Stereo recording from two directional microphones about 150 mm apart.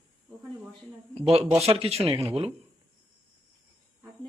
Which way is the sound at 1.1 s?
45° right (ahead or behind).